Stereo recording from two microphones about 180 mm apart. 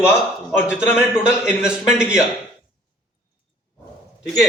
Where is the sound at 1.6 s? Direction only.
5° right (ahead or behind).